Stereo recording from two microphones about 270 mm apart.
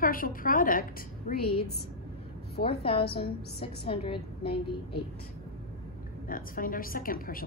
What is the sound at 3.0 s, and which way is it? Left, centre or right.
Speech, left.